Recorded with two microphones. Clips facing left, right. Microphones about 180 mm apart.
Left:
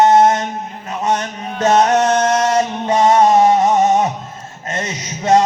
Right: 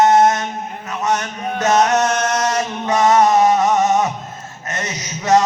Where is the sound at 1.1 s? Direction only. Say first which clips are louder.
Left 1 dB; 30° left (ahead or behind).